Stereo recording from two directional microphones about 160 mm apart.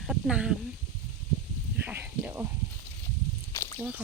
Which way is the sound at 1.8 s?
10° right (ahead or behind).